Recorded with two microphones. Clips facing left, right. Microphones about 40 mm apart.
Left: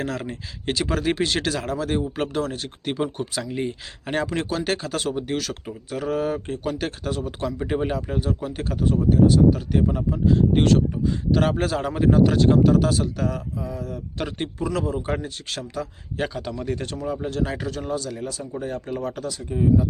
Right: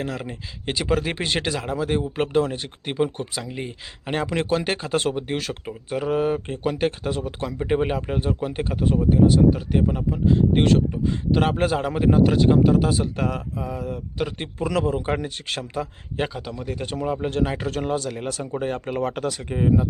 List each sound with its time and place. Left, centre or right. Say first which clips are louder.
0.0 s speech: left 1 dB; centre
4.2 s speech: right 3 dB; right; by 10.2 s centre
10.2 s speech: even; right
13.1 s speech: right 1 dB; right
14.2 s speech: even; centre
14.6 s speech: right 3 dB; right
15.7 s speech: right 2 dB; right
16.3 s speech: left 3 dB; centre
17.1 s speech: right 2 dB; right
17.7 s speech: right 3 dB; right